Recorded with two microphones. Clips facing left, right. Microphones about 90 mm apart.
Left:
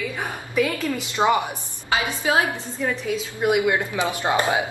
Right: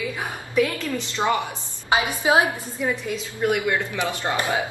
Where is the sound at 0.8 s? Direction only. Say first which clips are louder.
Left 3 dB; 15° left (ahead or behind).